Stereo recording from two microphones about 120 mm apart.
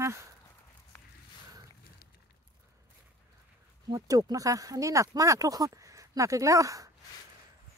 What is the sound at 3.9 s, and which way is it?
Speech, 30° right (ahead or behind).